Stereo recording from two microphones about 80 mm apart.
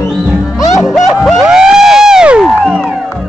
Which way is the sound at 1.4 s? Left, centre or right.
Centre.